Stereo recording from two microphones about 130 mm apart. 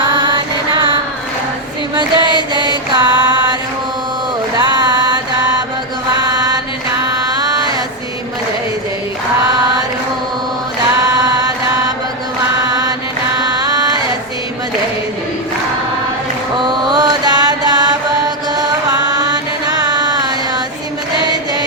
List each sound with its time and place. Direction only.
0.0 s mantra: 35° right (ahead or behind)
2.0 s mantra: 35° right (ahead or behind)
4.5 s music: 35° right (ahead or behind)
6.3 s mantra: 30° right (ahead or behind)
11.0 s chant: 30° right (ahead or behind)
13.5 s chant: 30° right (ahead or behind)
16.9 s mantra: 35° right (ahead or behind)
18.5 s chant: 30° right (ahead or behind)